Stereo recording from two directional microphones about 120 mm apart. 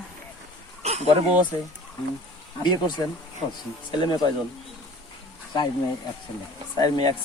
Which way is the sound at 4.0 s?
35° left (ahead or behind).